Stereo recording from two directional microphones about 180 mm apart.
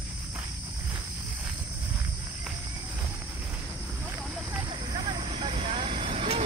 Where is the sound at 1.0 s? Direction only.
10° right (ahead or behind).